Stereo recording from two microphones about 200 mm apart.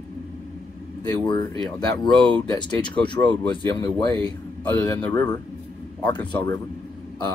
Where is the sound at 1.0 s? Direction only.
20° left (ahead or behind).